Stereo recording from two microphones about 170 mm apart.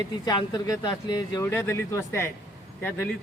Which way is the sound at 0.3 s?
25° left (ahead or behind).